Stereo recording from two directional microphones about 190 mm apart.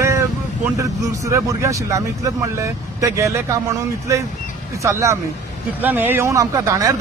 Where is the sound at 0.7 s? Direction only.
15° right (ahead or behind).